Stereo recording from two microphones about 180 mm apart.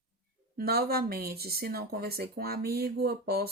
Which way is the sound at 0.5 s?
60° right (ahead or behind).